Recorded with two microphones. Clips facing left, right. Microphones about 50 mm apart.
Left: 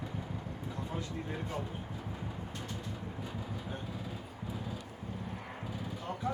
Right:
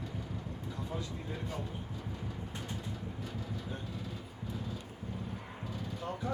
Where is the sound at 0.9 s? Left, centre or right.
Left.